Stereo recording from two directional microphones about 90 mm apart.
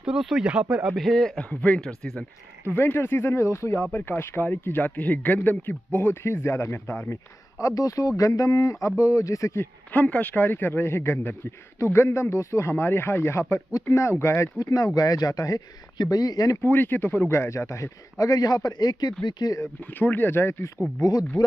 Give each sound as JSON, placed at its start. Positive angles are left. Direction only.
{"t": 0.0, "sound": "speech", "side_deg": -5}
{"t": 0.9, "sound": "a man's voice", "side_deg": 5}
{"t": 2.6, "sound": "speech", "side_deg": 25}
{"t": 7.6, "sound": "a man's voice", "side_deg": 40}
{"t": 9.9, "sound": "a man's voice", "side_deg": 15}
{"t": 14.6, "sound": "speech", "side_deg": 40}
{"t": 16.6, "sound": "a man's voice", "side_deg": 25}
{"t": 20.0, "sound": "speech", "side_deg": 20}
{"t": 21.0, "sound": "speech", "side_deg": 45}